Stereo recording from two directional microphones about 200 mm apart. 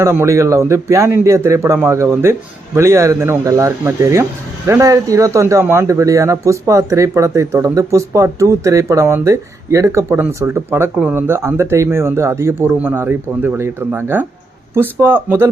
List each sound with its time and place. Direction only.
0.0 s speech: 15° right (ahead or behind)